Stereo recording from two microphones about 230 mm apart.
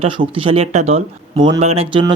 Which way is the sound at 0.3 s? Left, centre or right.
Right.